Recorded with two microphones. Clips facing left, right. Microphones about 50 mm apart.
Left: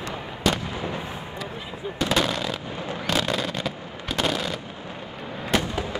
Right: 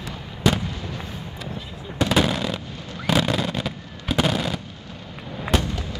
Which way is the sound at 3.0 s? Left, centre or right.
Centre.